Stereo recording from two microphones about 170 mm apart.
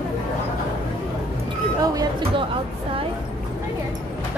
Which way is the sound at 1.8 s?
20° right (ahead or behind).